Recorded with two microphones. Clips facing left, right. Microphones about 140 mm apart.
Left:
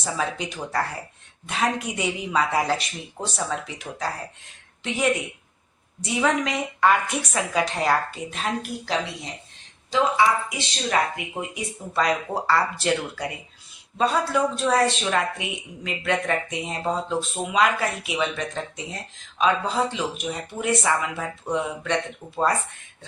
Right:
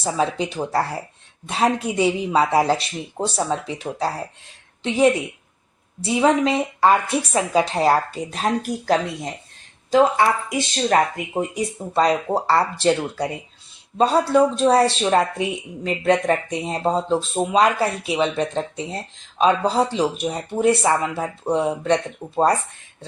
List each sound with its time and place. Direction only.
0.0 s a woman's voice: 30° right (ahead or behind); by 9.3 s 50° right (ahead or behind)
10.6 s a woman's voice: 45° right (ahead or behind)